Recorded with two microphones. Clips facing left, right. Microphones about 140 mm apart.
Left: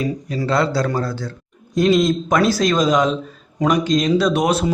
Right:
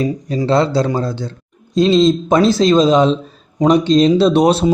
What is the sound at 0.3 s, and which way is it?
A man's voice, 25° right (ahead or behind).